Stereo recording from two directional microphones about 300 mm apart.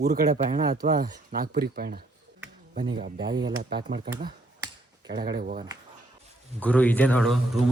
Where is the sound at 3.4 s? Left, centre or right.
Right.